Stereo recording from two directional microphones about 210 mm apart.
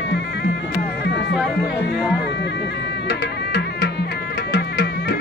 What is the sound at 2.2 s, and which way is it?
Music, 55° left (ahead or behind).